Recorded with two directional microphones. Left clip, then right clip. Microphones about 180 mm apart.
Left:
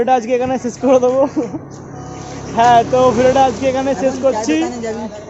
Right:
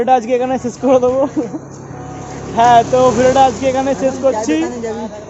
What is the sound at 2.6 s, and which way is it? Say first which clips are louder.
Speech: right 1 dB; 5° right (ahead or behind).